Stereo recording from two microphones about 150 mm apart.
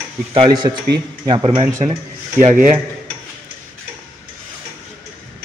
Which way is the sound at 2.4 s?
55° right (ahead or behind).